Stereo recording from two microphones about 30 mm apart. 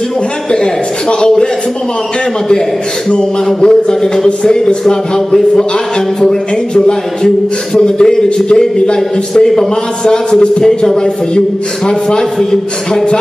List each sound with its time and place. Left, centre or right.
3.6 s speech: left
11.9 s speech: left
12.4 s speech: centre